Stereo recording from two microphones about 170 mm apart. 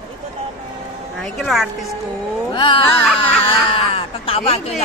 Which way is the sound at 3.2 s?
30° left (ahead or behind).